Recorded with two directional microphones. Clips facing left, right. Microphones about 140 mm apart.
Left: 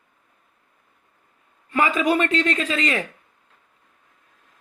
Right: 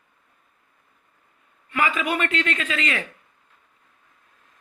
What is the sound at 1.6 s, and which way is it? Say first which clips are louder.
A man's voice: left 4 dB; 40° left (ahead or behind).